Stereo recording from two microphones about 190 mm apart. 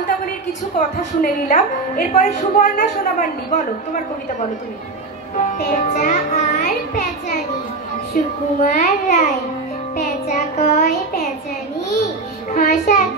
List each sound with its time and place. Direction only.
0.2 s a woman's voice: 40° left (ahead or behind)
5.6 s child singing: 40° left (ahead or behind)
8.1 s child singing: 40° left (ahead or behind)
12.5 s a woman's voice: 45° left (ahead or behind)